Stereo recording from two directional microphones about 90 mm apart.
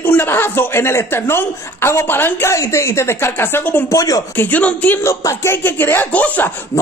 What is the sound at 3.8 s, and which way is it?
Speech, 40° left (ahead or behind).